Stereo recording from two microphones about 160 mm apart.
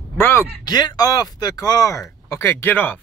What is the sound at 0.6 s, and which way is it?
Speech, 25° left (ahead or behind).